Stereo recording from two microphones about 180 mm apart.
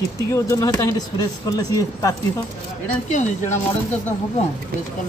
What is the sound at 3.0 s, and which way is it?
Speech, 40° left (ahead or behind).